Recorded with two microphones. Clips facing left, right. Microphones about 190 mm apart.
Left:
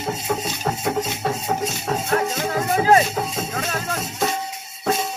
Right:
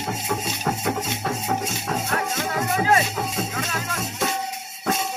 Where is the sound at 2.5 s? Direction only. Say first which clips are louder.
Left 4 dB; 35° left (ahead or behind).